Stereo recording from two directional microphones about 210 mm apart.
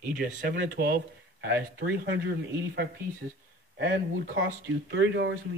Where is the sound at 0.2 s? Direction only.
40° right (ahead or behind).